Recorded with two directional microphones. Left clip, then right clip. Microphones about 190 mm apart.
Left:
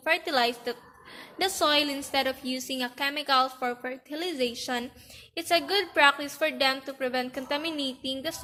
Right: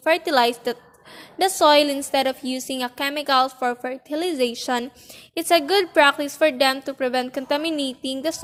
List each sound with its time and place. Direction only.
0.0 s a woman's voice: 45° right (ahead or behind)